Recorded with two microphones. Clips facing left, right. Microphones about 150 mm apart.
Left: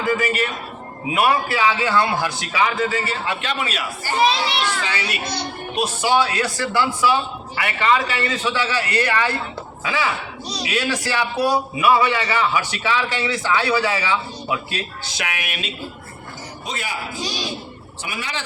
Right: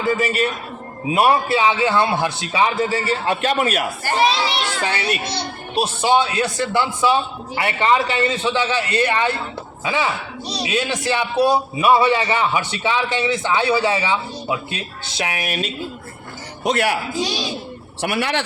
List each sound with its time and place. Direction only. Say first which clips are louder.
0.1 s a man's voice: right 2 dB; 30° right (ahead or behind); by 4.1 s 50° right (ahead or behind)
4.8 s a man's voice: right 4 dB; 35° right (ahead or behind)
16.6 s speech: right 11 dB; 70° right (ahead or behind)
18.0 s speech: right 9 dB; 65° right (ahead or behind)